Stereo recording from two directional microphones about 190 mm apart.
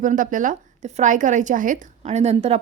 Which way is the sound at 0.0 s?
45° right (ahead or behind).